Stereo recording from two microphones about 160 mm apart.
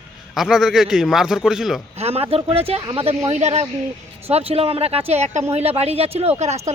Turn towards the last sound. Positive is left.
turn(degrees=-45)  # may be behind; listen again after turning